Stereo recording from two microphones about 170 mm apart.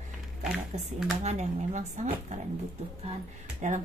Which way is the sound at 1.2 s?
45° right (ahead or behind).